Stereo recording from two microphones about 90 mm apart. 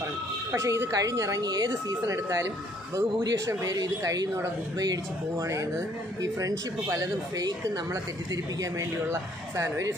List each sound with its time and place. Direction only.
0.5 s a man's voice: 30° right (ahead or behind); by 1.7 s 50° right (ahead or behind)
1.7 s a man's voice: 35° right (ahead or behind)
5.4 s a man's voice: 35° right (ahead or behind)